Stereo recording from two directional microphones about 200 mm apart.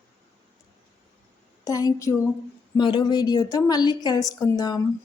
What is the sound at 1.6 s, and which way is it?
A woman's voice, 15° left (ahead or behind).